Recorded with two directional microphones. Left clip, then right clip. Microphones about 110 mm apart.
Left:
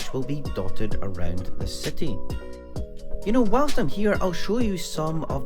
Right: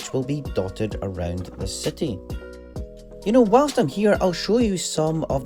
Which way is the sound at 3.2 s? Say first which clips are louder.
Right 6 dB; 35° right (ahead or behind).